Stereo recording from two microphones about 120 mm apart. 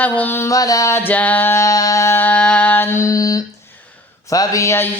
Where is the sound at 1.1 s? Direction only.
15° left (ahead or behind).